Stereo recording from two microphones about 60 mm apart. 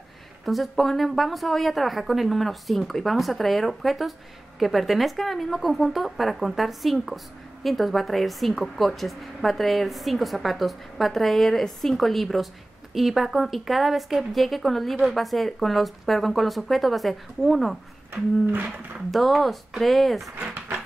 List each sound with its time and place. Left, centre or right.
0.5 s speech: centre
18.1 s a sound: right
19.0 s speech: centre
20.3 s speech: right